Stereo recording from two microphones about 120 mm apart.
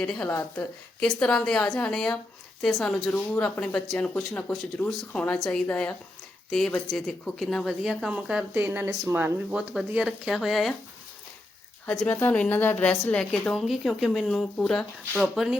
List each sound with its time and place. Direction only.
0.3 s speech: 20° left (ahead or behind)
0.9 s a woman's voice: 5° left (ahead or behind); by 9.6 s 15° right (ahead or behind)
9.6 s speech: 5° right (ahead or behind)
11.9 s a woman's voice: 10° left (ahead or behind)